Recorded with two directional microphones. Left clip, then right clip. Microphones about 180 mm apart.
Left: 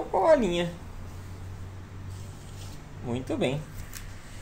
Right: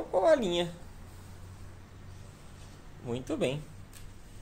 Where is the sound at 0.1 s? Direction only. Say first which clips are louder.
Left 3 dB; 50° right (ahead or behind).